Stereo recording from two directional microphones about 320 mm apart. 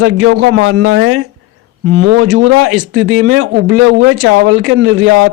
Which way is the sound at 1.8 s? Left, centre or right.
Right.